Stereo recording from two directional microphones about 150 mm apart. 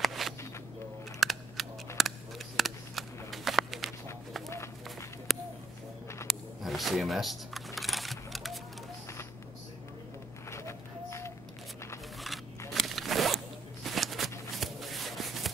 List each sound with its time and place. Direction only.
0.0 s a sound: centre (ahead or behind)
1.2 s camera: centre (ahead or behind)
1.6 s scissors: centre (ahead or behind)
2.0 s a sound: centre (ahead or behind)
6.2 s computer keyboard: centre (ahead or behind)
10.5 s run: 20° left (ahead or behind)
12.2 s zipper: centre (ahead or behind)
13.8 s a sound: centre (ahead or behind)
14.6 s shuffle: centre (ahead or behind)